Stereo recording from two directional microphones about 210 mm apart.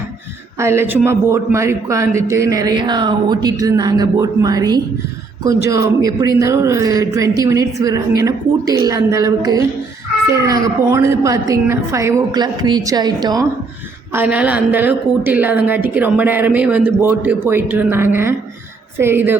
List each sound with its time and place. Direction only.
0.6 s a woman's voice: 10° right (ahead or behind)
14.1 s a woman's voice: 10° right (ahead or behind)